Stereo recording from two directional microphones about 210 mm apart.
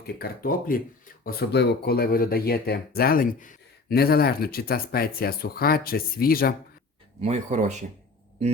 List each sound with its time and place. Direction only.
0.2 s speech: 45° left (ahead or behind)
7.2 s speech: 30° right (ahead or behind)